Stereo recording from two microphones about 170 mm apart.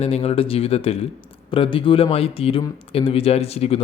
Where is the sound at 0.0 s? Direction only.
35° left (ahead or behind).